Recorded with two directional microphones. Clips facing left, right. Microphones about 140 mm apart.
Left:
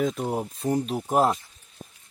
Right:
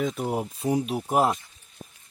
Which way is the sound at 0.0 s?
Centre (ahead or behind).